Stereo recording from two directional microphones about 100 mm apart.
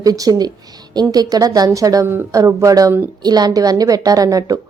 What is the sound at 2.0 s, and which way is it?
Speech, 20° right (ahead or behind).